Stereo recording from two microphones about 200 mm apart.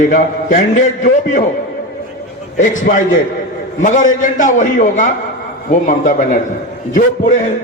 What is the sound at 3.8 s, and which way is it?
A man's voice, 40° left (ahead or behind).